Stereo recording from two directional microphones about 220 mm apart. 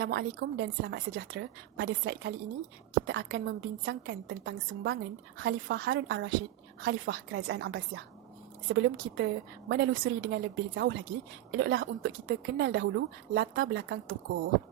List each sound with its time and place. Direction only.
0.0 s a woman's voice: 50° right (ahead or behind)